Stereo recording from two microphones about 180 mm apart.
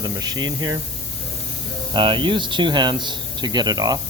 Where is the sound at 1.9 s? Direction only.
25° right (ahead or behind).